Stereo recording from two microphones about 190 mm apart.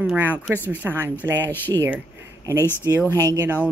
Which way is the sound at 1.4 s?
10° left (ahead or behind).